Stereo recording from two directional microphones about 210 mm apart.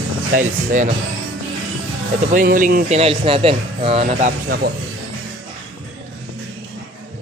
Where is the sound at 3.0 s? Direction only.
25° right (ahead or behind); by 4.7 s 40° right (ahead or behind).